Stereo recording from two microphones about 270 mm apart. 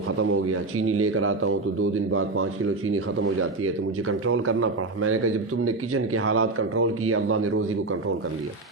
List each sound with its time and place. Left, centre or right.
0.2 s speech: right